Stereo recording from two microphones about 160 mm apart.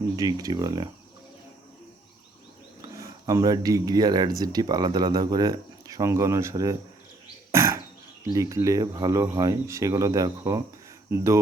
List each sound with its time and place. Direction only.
0.2 s speech: 25° right (ahead or behind)
3.0 s speech: 20° right (ahead or behind)
7.5 s a sound: 15° right (ahead or behind)
8.2 s speech: 20° right (ahead or behind)